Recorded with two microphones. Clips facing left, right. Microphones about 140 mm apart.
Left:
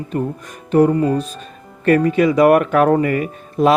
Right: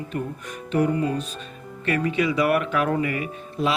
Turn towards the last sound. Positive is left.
turn(degrees=45)  # may be behind; listen again after turning